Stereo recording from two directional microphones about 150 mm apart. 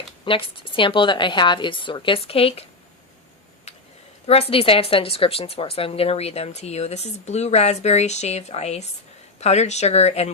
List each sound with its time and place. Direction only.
0.3 s speech: 35° left (ahead or behind)
4.3 s speech: 40° left (ahead or behind)